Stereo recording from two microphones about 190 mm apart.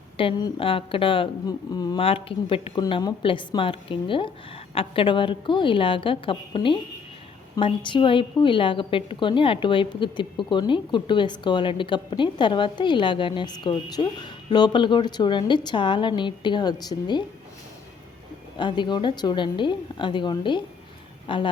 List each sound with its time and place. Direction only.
0.2 s a woman's voice: 25° left (ahead or behind)
18.5 s a woman's voice: 25° left (ahead or behind)